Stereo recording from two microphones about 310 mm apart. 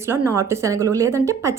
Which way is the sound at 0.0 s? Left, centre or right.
Centre.